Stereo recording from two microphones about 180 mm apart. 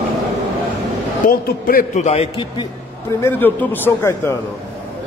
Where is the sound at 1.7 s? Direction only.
50° left (ahead or behind).